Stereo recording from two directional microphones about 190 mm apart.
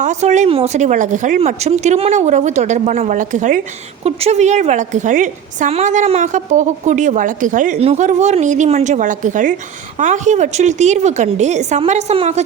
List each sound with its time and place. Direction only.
0.0 s a woman's voice: 40° right (ahead or behind)